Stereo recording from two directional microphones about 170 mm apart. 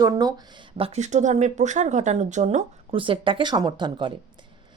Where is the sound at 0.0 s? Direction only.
20° right (ahead or behind); by 2.6 s 45° right (ahead or behind).